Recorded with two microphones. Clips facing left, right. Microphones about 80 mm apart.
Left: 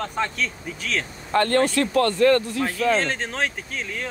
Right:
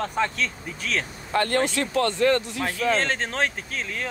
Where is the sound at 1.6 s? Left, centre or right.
Centre.